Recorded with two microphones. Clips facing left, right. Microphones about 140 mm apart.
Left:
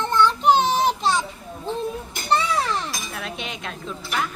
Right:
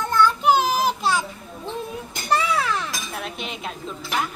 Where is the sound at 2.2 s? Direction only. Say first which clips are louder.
Even; 35° left (ahead or behind).